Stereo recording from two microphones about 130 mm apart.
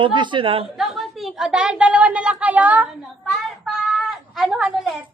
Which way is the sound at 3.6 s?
5° right (ahead or behind).